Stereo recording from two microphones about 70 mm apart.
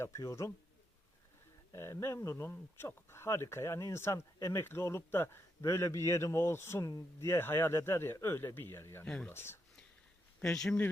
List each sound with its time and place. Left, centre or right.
0.0 s speech: left
1.7 s speech: left
9.0 s speech: centre
9.3 s speech: left
10.4 s speech: centre